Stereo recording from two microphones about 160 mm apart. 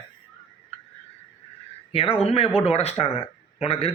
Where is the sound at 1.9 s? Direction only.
35° left (ahead or behind).